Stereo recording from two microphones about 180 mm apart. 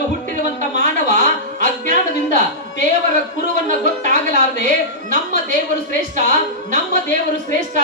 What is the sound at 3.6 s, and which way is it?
A woman's voice, 45° right (ahead or behind).